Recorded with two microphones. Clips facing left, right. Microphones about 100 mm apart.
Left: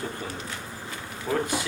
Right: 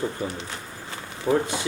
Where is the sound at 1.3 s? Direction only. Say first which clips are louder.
Right 4 dB; 25° right (ahead or behind).